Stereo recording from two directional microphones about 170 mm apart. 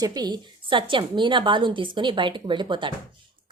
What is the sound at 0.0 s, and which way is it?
A woman's voice, 25° right (ahead or behind).